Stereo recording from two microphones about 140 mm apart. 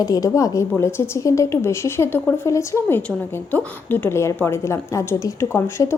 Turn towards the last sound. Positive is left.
turn(degrees=20)  # may be behind; listen again after turning